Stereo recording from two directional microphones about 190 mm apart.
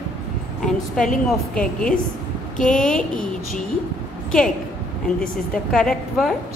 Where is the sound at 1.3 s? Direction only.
5° left (ahead or behind).